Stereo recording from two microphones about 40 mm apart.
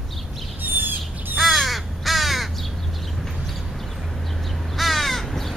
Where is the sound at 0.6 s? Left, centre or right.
Right.